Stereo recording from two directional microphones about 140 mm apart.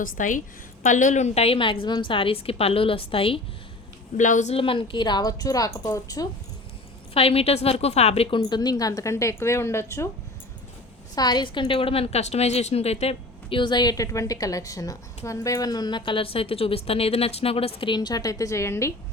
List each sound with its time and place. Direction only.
0.0 s a woman's voice: 70° left (ahead or behind); by 3.4 s 40° left (ahead or behind)
4.2 s a woman's voice: 60° left (ahead or behind)
4.5 s a woman's voice: 40° left (ahead or behind); by 6.2 s 25° left (ahead or behind)
7.1 s a woman's voice: 45° left (ahead or behind)
8.4 s a woman's voice: 30° left (ahead or behind)
11.1 s a woman's voice: 30° left (ahead or behind)